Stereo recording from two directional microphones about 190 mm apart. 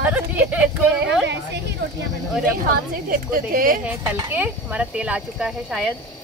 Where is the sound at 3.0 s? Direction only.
50° right (ahead or behind).